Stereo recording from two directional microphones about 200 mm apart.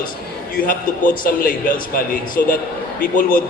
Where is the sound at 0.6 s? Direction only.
45° left (ahead or behind).